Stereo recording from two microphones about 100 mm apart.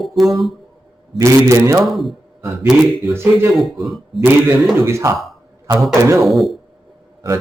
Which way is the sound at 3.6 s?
Centre (ahead or behind).